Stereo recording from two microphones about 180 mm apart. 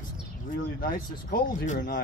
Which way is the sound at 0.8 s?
50° left (ahead or behind).